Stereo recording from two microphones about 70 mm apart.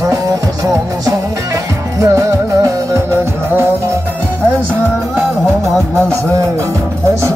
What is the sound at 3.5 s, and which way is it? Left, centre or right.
Music, right.